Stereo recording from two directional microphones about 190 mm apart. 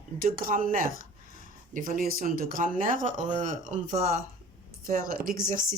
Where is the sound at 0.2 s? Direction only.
50° right (ahead or behind).